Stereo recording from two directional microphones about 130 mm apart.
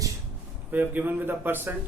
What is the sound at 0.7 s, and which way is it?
A man's voice, 15° right (ahead or behind).